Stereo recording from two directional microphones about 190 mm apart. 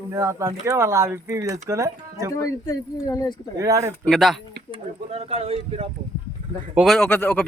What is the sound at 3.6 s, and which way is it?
Speech, 15° right (ahead or behind).